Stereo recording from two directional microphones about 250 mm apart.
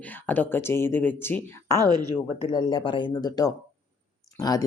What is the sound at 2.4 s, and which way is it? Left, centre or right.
Speech, centre.